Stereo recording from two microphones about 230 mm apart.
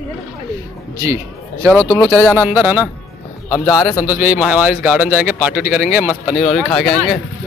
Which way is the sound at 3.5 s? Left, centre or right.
Centre.